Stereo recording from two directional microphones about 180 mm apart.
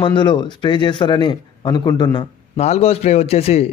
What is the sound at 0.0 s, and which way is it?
Speech, 25° left (ahead or behind).